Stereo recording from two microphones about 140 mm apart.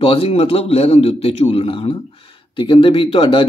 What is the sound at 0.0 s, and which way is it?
A man's voice, 40° left (ahead or behind).